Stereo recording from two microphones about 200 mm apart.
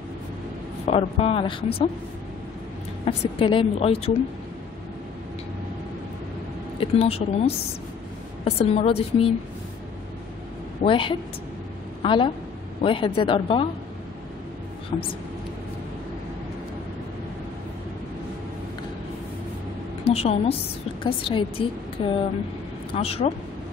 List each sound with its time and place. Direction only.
0.8 s speech: 30° left (ahead or behind)
3.1 s speech: 25° left (ahead or behind)
6.8 s a woman's voice: 30° left (ahead or behind)
10.8 s a woman's voice: 25° left (ahead or behind)
14.9 s speech: 30° left (ahead or behind)
20.1 s a woman's voice: 30° left (ahead or behind)